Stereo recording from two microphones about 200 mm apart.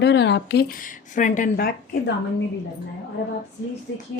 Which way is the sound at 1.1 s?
40° left (ahead or behind).